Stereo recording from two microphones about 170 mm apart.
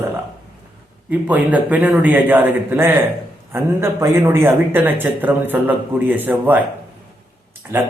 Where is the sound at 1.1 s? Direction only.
10° right (ahead or behind).